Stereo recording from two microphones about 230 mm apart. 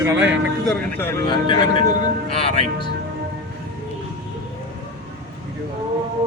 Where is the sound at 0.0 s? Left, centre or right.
Centre.